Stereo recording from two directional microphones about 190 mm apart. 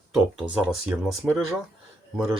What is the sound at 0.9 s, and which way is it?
Speech, centre (ahead or behind).